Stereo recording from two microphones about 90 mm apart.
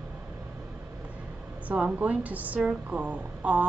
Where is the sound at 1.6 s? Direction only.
15° right (ahead or behind).